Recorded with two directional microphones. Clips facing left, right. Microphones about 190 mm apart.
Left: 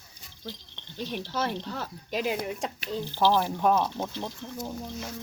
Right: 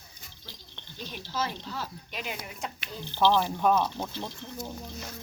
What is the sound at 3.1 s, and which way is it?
Speech, 10° left (ahead or behind).